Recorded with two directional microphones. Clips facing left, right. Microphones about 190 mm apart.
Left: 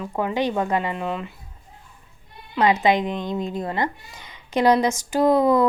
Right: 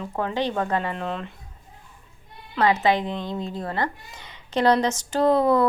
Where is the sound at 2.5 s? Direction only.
15° left (ahead or behind).